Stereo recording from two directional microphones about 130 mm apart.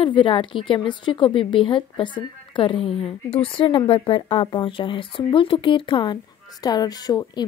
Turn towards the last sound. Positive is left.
turn(degrees=30)  # may be behind; listen again after turning